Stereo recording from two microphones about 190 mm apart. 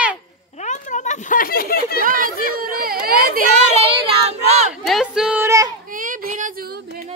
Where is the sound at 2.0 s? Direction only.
45° right (ahead or behind).